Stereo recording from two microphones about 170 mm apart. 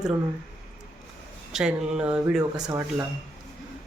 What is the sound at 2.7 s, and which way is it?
Speech, 15° right (ahead or behind).